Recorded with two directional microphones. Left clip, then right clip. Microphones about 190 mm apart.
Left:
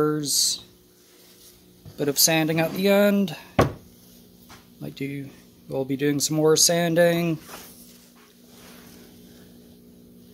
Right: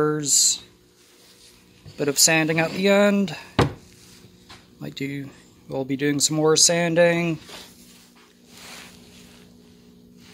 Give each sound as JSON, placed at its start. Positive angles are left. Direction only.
{"t": 0.0, "sound": "speech", "side_deg": 0}
{"t": 2.0, "sound": "speech", "side_deg": 5}
{"t": 4.7, "sound": "speech", "side_deg": 0}